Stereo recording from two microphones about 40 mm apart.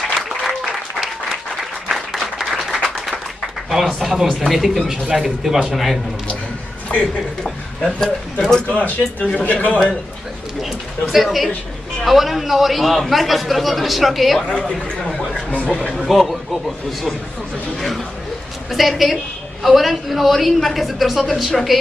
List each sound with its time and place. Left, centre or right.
0.6 s applause: centre
3.7 s a man's voice: centre
6.9 s speech: left
7.8 s speech: centre
8.6 s speech: left
10.6 s a man's voice: centre
14.6 s speech: centre
15.0 s a sound: centre
15.7 s speech: centre
16.0 s a man's voice: centre
17.7 s a sound: centre
18.7 s a man's voice: centre